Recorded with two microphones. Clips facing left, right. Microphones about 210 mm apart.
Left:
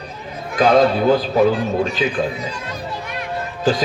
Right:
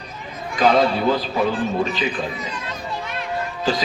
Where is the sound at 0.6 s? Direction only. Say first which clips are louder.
Left 3 dB; 45° left (ahead or behind).